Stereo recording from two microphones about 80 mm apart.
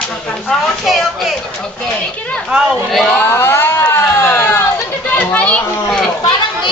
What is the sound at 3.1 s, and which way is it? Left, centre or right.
Speech, left.